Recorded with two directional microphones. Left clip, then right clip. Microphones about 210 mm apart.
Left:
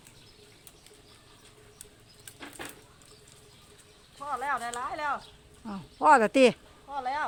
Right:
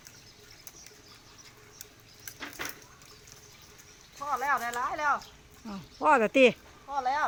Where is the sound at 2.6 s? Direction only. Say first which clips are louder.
Right 4 dB; 40° right (ahead or behind).